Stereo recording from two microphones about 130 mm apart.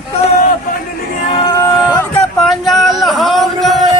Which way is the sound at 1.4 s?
30° left (ahead or behind).